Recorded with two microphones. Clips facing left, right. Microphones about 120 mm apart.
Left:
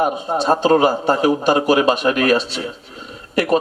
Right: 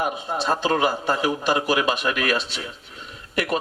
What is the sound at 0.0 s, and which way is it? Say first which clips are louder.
A man's voice: left 7 dB; 40° left (ahead or behind).